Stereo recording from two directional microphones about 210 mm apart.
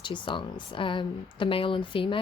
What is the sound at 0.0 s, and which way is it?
Speech, 20° left (ahead or behind).